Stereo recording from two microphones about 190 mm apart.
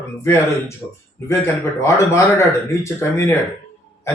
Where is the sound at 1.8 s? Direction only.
15° left (ahead or behind).